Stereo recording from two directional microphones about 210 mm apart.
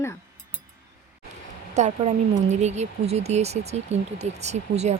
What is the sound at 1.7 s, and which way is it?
Speech, 35° right (ahead or behind).